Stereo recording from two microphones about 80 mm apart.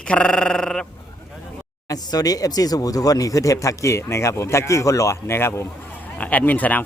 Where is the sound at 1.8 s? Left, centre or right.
Left.